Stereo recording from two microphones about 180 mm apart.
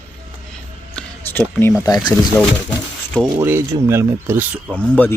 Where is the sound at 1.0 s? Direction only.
10° left (ahead or behind).